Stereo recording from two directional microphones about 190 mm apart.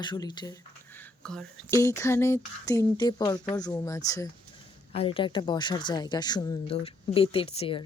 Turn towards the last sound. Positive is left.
turn(degrees=30)  # may be behind; listen again after turning